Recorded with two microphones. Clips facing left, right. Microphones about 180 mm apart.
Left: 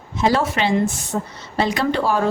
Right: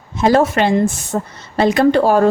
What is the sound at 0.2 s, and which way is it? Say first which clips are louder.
A woman's voice: right 6 dB; 50° right (ahead or behind).